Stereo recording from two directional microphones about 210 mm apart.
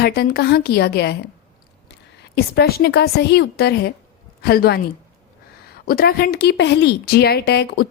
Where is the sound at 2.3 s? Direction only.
50° left (ahead or behind).